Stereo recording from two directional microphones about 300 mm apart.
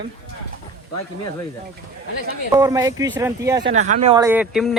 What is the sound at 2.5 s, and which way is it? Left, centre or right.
Speech, centre.